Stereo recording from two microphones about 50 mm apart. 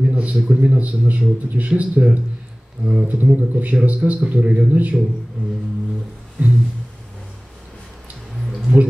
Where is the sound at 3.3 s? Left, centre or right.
Right.